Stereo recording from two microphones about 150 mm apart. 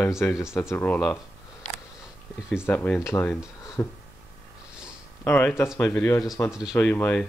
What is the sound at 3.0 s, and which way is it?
Speech, 20° left (ahead or behind).